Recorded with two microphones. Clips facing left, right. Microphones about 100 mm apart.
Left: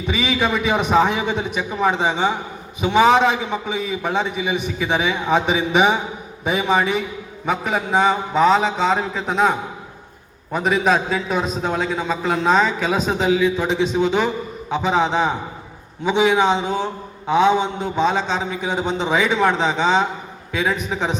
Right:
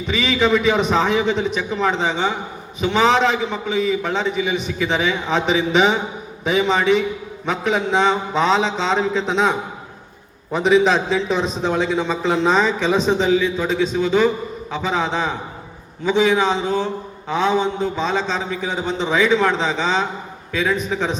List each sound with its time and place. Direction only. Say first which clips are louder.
0.1 s a man's voice: right 3 dB; 10° left (ahead or behind)